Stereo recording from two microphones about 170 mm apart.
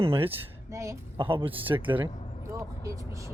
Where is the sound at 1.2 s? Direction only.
30° right (ahead or behind).